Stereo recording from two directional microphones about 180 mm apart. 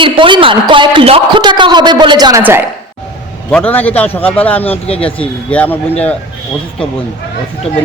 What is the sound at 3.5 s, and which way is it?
A man's voice, 10° left (ahead or behind).